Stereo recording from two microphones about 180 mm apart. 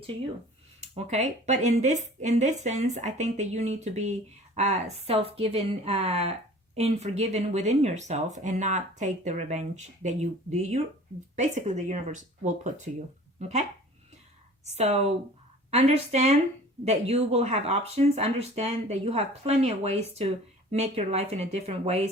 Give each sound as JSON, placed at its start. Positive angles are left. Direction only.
{"t": 0.8, "sound": "speech", "side_deg": -40}